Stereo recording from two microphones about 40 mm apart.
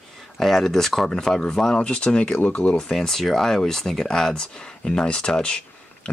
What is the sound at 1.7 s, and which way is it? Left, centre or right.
Speech, left.